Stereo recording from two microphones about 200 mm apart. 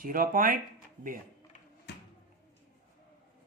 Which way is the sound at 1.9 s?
55° left (ahead or behind).